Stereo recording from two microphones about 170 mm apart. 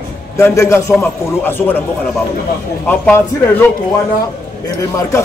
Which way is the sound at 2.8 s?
10° left (ahead or behind).